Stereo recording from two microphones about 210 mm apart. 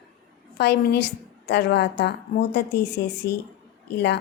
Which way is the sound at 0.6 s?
55° left (ahead or behind).